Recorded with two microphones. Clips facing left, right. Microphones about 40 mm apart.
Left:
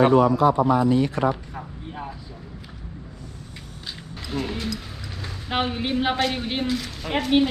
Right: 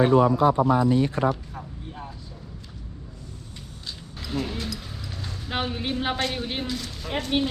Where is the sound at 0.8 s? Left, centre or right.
Left.